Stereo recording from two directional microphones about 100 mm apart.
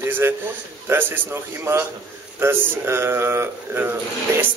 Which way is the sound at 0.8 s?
20° right (ahead or behind).